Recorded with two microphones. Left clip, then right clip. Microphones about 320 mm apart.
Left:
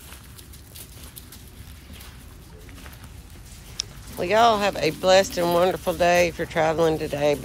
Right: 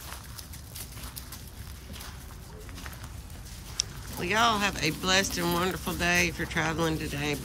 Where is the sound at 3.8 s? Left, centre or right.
Centre.